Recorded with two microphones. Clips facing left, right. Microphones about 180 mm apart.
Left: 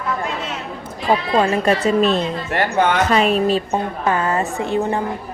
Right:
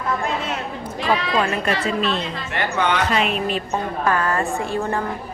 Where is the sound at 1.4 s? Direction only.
40° left (ahead or behind).